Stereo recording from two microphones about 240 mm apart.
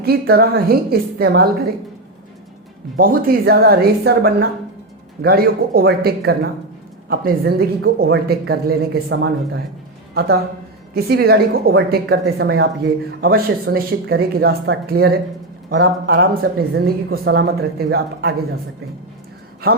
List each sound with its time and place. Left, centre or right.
0.0 s a woman's voice: right
3.0 s a woman's voice: right
19.6 s a woman's voice: right